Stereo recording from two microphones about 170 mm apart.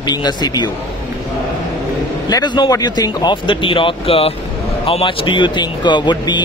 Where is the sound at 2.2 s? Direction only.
25° left (ahead or behind).